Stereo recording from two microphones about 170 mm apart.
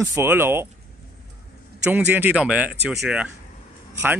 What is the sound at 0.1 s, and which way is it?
Speech, 15° right (ahead or behind).